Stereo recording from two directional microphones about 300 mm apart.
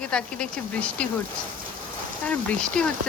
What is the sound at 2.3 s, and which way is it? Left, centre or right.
Speech, centre.